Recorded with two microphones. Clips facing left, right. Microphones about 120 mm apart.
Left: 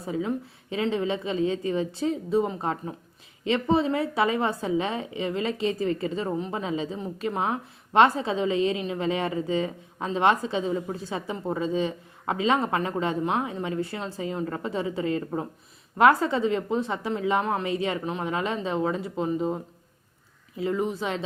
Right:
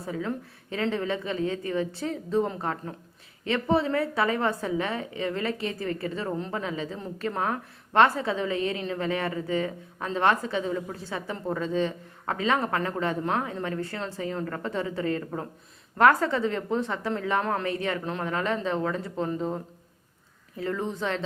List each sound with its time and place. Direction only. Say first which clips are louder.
0.0 s a woman's voice: left 3 dB; 15° left (ahead or behind)
18.0 s speech: left 1 dB; 5° left (ahead or behind)
18.3 s a woman's voice: right 1 dB; 15° left (ahead or behind)